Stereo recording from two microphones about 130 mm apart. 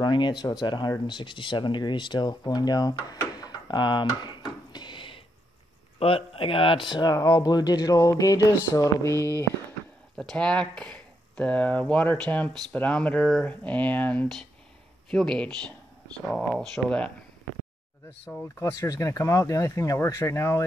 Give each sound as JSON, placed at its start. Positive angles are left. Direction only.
{"t": 0.0, "sound": "speech", "side_deg": 35}
{"t": 10.1, "sound": "speech", "side_deg": 5}
{"t": 18.3, "sound": "speech", "side_deg": 10}
{"t": 18.6, "sound": "speech", "side_deg": 25}